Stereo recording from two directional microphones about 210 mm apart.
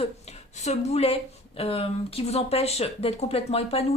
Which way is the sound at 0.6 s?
30° left (ahead or behind).